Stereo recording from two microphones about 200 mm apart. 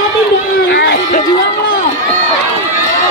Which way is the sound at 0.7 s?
55° left (ahead or behind).